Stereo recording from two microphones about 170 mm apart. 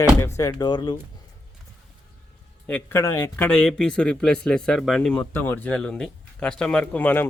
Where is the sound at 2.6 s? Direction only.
10° left (ahead or behind).